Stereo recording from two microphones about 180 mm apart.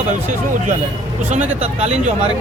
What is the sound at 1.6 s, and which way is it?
Speech, 35° right (ahead or behind).